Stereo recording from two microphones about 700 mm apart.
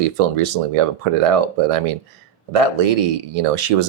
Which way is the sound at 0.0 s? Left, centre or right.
Right.